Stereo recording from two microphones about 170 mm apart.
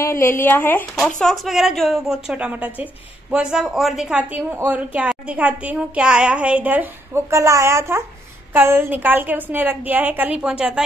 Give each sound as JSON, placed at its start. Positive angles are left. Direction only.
{"t": 0.0, "sound": "speech", "side_deg": 15}
{"t": 1.2, "sound": "a woman's voice", "side_deg": 0}